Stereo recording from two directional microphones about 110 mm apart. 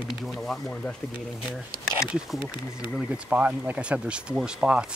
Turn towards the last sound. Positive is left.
turn(degrees=-10)  # may be behind; listen again after turning